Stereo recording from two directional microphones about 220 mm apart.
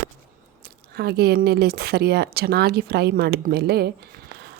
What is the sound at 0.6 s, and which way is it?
Speech, 45° right (ahead or behind).